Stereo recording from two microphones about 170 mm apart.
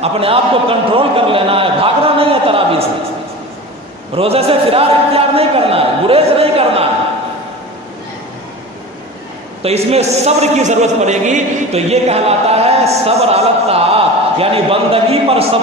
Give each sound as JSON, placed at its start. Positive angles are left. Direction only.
{"t": 0.0, "sound": "a man's voice", "side_deg": -35}
{"t": 4.1, "sound": "a man's voice", "side_deg": -35}
{"t": 9.6, "sound": "a man's voice", "side_deg": -35}